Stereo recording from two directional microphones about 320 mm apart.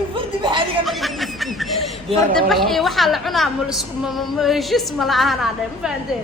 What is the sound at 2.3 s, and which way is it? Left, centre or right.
A woman's voice, centre.